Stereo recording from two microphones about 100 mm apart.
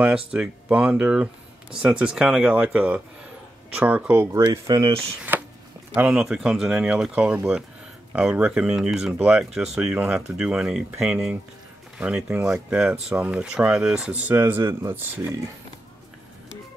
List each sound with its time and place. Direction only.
0.3 s speech: 10° right (ahead or behind)
4.4 s speech: 40° right (ahead or behind)
5.3 s a sound: 15° right (ahead or behind)
5.9 s speech: 10° right (ahead or behind)
14.3 s speech: 25° right (ahead or behind)